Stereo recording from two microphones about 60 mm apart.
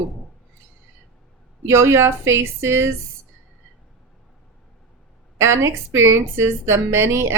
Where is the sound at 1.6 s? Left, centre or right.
Right.